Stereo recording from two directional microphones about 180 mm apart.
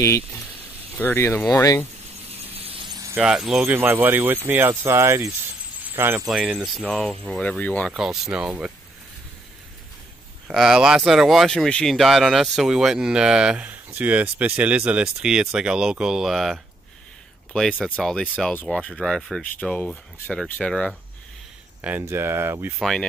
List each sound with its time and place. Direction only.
0.0 s speech: 15° left (ahead or behind)
2.5 s a sound: 30° right (ahead or behind)
3.2 s speech: 5° right (ahead or behind)
10.5 s speech: 5° right (ahead or behind)
21.8 s speech: 10° right (ahead or behind)
22.8 s speech: centre (ahead or behind)